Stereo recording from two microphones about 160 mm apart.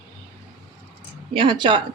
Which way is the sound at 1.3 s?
30° right (ahead or behind).